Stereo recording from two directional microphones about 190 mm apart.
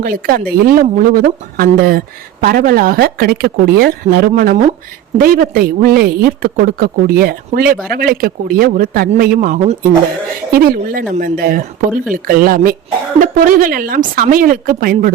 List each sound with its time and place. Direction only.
0.0 s a woman's voice: 50° right (ahead or behind)